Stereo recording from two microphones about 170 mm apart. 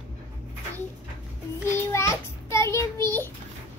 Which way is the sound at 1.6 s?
15° left (ahead or behind).